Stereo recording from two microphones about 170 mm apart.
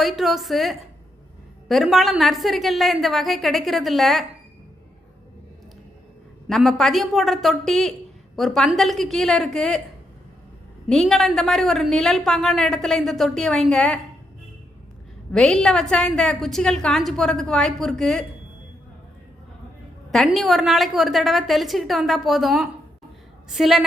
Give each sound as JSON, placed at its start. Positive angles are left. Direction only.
{"t": 0.0, "sound": "a woman's voice", "side_deg": 0}
{"t": 6.5, "sound": "a woman's voice", "side_deg": 0}
{"t": 10.8, "sound": "a woman's voice", "side_deg": 5}
{"t": 15.3, "sound": "a woman's voice", "side_deg": 5}
{"t": 20.1, "sound": "a woman's voice", "side_deg": 0}